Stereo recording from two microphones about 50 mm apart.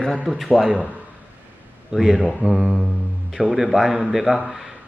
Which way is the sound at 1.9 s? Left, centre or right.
Centre.